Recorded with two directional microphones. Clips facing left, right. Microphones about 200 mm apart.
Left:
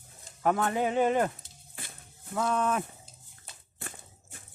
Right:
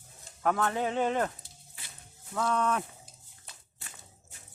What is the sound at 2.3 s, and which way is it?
Speech, 5° left (ahead or behind).